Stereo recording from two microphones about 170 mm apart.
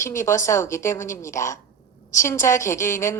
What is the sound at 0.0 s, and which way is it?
A woman's voice, 15° left (ahead or behind).